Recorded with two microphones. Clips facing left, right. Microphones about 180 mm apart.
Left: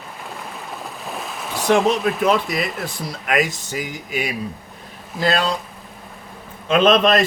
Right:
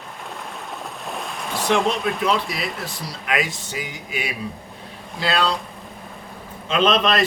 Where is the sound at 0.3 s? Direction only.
Centre (ahead or behind).